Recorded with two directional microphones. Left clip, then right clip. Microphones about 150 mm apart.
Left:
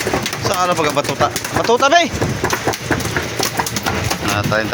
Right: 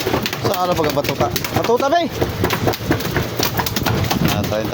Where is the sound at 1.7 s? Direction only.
Centre (ahead or behind).